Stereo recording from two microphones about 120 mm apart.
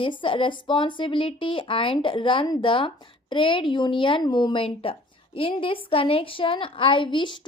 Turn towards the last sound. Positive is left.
turn(degrees=40)  # may be behind; listen again after turning